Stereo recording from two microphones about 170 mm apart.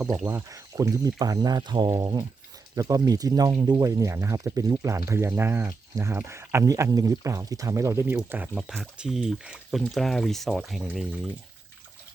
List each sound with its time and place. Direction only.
0.3 s speech: 15° right (ahead or behind)